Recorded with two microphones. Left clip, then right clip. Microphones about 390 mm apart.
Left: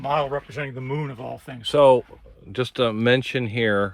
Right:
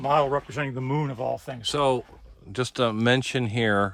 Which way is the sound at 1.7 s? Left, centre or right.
Centre.